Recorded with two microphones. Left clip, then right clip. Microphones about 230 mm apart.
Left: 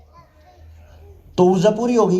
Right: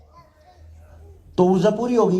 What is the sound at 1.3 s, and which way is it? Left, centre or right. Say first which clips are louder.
Speech: left 3 dB; left.